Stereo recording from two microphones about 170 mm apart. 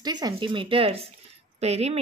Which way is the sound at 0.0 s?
25° right (ahead or behind).